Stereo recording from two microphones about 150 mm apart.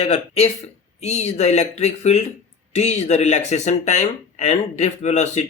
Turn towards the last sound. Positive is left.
turn(degrees=50)  # may be behind; listen again after turning